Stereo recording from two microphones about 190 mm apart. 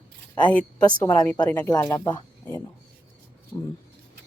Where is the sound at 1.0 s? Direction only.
10° left (ahead or behind).